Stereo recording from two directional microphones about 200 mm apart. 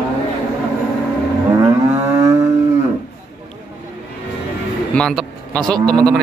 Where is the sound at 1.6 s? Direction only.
15° right (ahead or behind).